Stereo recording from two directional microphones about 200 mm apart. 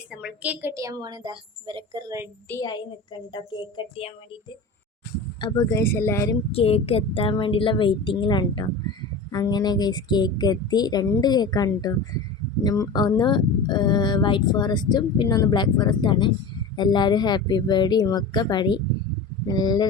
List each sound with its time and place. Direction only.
0.1 s a woman's voice: 5° right (ahead or behind); by 2.2 s 20° right (ahead or behind)
2.5 s speech: 20° left (ahead or behind)
5.4 s a woman's voice: 15° left (ahead or behind)
6.5 s speech: 30° left (ahead or behind)